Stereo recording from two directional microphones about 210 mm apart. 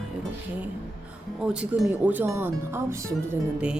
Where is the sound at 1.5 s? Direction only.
5° right (ahead or behind).